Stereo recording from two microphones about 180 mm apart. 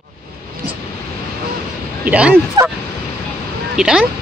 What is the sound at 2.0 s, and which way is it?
Speech, 5° right (ahead or behind).